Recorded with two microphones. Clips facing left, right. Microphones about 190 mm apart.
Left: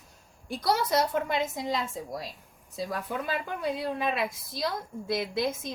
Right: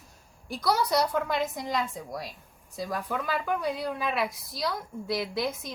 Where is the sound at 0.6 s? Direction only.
25° left (ahead or behind).